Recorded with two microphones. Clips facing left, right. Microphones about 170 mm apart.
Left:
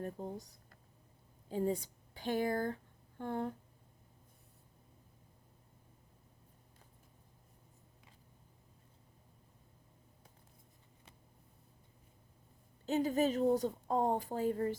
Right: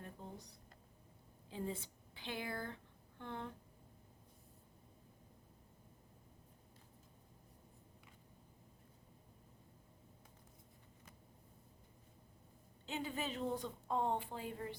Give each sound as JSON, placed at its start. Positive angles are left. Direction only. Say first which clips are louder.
{"t": 0.0, "sound": "a woman's voice", "louder": "left 10 dB", "side_deg": 40}
{"t": 12.8, "sound": "a woman's voice", "louder": "left 11 dB", "side_deg": 40}